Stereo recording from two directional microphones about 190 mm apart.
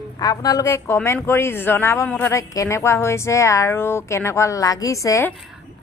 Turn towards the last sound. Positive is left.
turn(degrees=15)  # may be behind; listen again after turning